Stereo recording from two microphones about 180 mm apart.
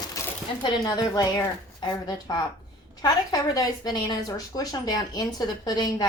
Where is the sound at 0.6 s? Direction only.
20° left (ahead or behind).